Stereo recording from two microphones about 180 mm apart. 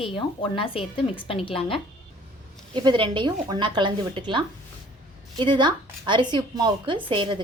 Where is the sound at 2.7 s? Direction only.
25° right (ahead or behind).